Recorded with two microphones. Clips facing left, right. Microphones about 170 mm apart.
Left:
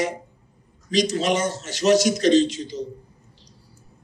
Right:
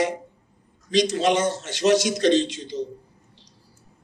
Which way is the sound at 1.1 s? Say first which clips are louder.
Right 1 dB; 60° right (ahead or behind).